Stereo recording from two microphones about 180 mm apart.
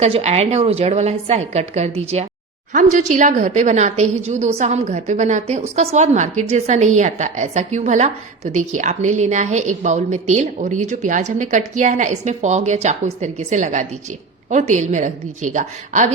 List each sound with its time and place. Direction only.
0.0 s a woman's voice: 35° right (ahead or behind)